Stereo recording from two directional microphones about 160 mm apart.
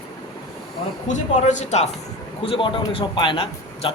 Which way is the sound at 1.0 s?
50° left (ahead or behind).